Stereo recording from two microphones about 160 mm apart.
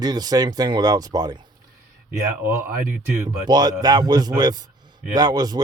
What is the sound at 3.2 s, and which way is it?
A man's voice, 25° right (ahead or behind).